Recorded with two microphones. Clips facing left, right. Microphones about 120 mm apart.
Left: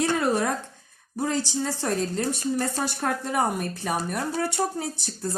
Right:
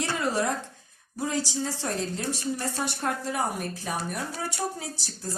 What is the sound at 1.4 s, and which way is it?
A woman's voice, 55° left (ahead or behind).